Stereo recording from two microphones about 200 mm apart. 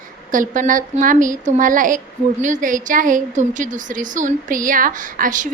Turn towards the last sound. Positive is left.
turn(degrees=-40)  # may be behind; listen again after turning